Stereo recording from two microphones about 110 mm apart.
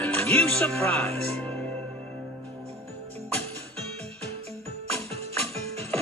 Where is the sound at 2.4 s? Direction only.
65° right (ahead or behind).